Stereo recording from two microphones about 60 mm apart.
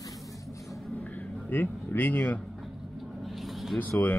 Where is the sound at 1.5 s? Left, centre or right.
Left.